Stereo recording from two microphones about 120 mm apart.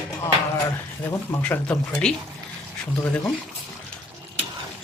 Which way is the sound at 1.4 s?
10° left (ahead or behind).